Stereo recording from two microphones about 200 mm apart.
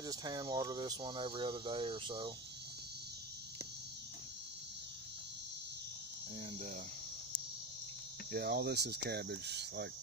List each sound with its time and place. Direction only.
0.0 s speech: 20° right (ahead or behind)
8.3 s cricket: 50° right (ahead or behind)